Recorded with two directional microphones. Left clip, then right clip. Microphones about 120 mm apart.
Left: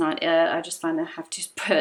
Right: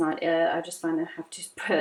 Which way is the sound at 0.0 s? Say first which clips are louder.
Left 3 dB; 40° left (ahead or behind).